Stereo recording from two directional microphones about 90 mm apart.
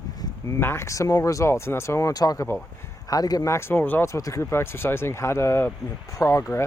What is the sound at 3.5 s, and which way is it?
Speech, 20° left (ahead or behind).